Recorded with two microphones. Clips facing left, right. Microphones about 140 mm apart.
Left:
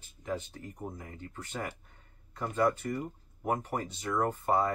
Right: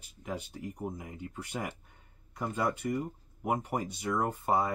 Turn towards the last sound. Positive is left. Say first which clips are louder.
# left 1 dB
turn(degrees=-10)  # may be behind; listen again after turning